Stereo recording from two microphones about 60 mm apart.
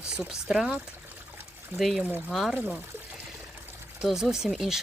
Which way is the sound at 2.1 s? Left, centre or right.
Right.